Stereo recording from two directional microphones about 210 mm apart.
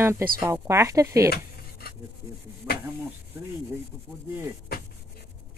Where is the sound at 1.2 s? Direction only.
45° left (ahead or behind).